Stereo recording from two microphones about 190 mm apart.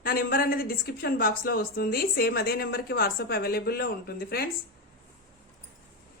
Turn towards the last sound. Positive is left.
turn(degrees=55)  # may be behind; listen again after turning